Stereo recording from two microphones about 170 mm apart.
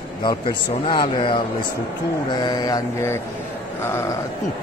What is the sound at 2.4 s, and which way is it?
Speech, 20° left (ahead or behind).